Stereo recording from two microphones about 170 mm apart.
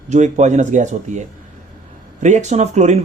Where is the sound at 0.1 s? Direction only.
45° right (ahead or behind).